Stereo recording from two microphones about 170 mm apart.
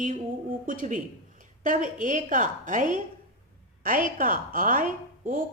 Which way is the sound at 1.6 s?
50° right (ahead or behind).